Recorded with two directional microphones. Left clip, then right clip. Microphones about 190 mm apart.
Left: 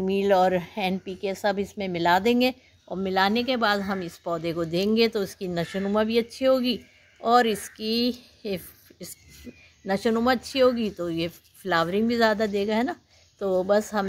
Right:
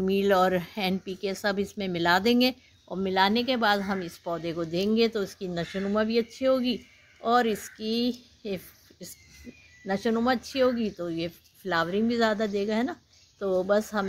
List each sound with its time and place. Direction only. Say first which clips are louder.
0.0 s a woman's voice: left 2 dB; centre (ahead or behind)